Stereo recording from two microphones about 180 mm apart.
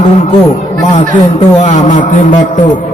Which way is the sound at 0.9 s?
40° left (ahead or behind).